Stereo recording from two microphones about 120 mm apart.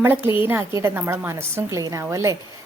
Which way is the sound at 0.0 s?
15° right (ahead or behind).